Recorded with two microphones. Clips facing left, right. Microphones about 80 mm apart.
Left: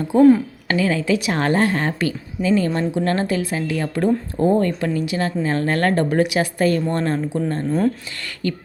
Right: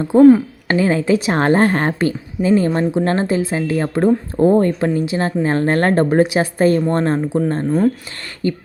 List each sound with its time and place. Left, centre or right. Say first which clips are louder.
0.0 s speech: right 4 dB; right